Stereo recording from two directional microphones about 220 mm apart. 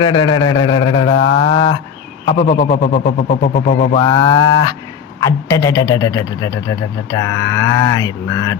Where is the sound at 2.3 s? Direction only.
35° left (ahead or behind).